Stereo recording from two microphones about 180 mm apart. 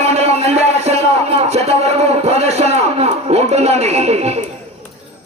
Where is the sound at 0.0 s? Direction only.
35° right (ahead or behind).